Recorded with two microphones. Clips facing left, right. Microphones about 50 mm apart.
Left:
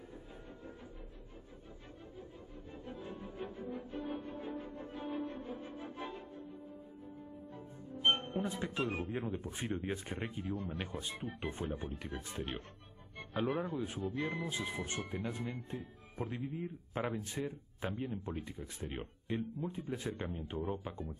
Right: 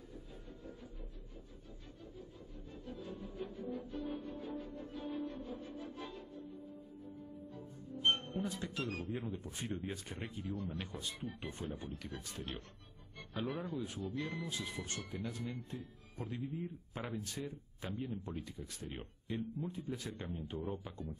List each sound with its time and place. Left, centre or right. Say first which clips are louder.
2.9 s music: even; left
7.5 s music: left 1 dB; left
9.7 s speech: left 4 dB; left